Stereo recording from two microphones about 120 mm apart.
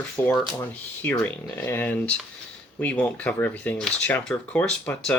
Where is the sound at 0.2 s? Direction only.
15° left (ahead or behind).